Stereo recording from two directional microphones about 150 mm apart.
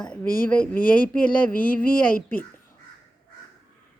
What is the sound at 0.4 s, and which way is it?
Speech, 10° left (ahead or behind).